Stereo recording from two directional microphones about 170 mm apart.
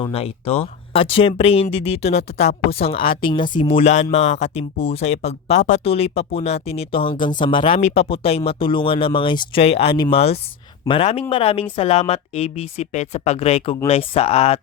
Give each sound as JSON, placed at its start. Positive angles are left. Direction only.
{"t": 0.1, "sound": "speech", "side_deg": 35}